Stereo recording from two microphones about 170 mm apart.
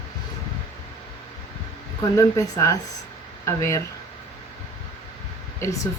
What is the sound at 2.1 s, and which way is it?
Speech, 20° left (ahead or behind).